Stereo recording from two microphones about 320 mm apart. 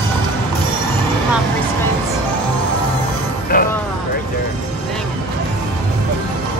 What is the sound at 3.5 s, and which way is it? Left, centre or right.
Music, left.